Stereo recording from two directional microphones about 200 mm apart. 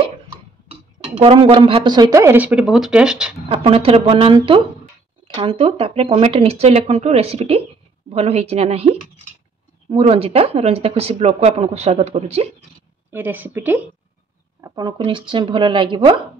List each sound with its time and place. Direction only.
0.7 s speech: 30° right (ahead or behind); by 3.3 s 5° right (ahead or behind)
3.4 s speech: 25° right (ahead or behind)
13.1 s speech: 10° right (ahead or behind)
14.6 s speech: 20° right (ahead or behind)